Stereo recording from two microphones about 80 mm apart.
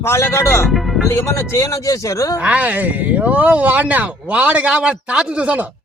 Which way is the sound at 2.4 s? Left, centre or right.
Centre.